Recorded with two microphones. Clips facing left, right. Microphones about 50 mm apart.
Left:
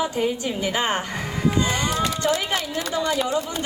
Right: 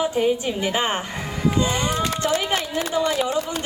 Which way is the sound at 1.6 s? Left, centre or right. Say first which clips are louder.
Even; centre.